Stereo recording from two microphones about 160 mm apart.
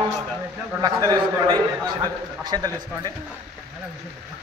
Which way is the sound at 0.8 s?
25° right (ahead or behind).